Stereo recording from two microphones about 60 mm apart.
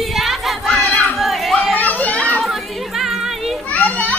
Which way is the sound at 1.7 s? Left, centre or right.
Left.